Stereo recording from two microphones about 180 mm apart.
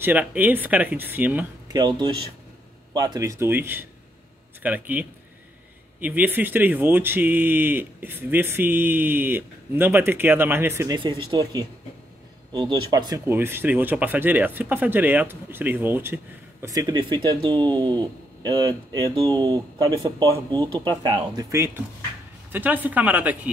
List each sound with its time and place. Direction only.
0.0 s speech: 10° right (ahead or behind)
1.7 s speech: 25° right (ahead or behind); by 23.5 s 10° right (ahead or behind)